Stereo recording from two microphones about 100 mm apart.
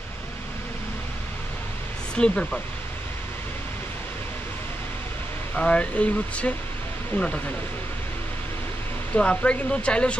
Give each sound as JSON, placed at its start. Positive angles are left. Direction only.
{"t": 2.1, "sound": "speech", "side_deg": 10}
{"t": 5.6, "sound": "speech", "side_deg": 10}
{"t": 9.1, "sound": "speech", "side_deg": 10}